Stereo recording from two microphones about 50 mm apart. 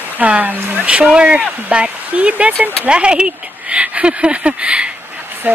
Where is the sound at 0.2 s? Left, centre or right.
Right.